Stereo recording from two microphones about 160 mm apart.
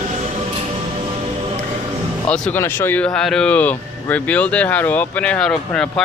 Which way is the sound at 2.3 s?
10° left (ahead or behind).